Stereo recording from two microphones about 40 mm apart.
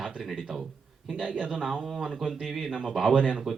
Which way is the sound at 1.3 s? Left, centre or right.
Centre.